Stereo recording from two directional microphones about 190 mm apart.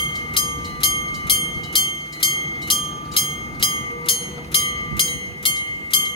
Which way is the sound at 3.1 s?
25° left (ahead or behind).